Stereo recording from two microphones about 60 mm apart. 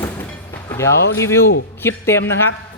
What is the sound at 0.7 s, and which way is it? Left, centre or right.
Speech, left.